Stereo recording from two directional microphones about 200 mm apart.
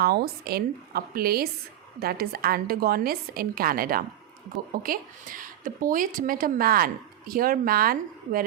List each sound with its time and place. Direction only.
0.0 s a woman's voice: 50° right (ahead or behind)